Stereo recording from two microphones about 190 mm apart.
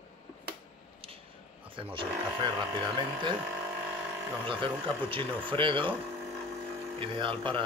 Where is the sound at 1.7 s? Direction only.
25° right (ahead or behind).